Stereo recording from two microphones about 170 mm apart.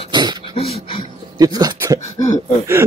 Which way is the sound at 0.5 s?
35° left (ahead or behind).